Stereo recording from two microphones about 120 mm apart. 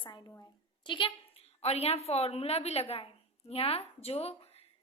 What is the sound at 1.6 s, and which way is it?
A woman's voice, 60° left (ahead or behind).